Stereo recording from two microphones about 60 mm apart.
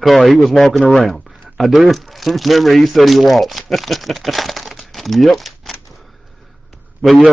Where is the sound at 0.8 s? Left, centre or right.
Centre.